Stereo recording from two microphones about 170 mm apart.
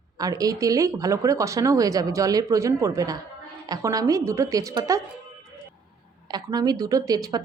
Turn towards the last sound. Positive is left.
turn(degrees=-20)  # may be behind; listen again after turning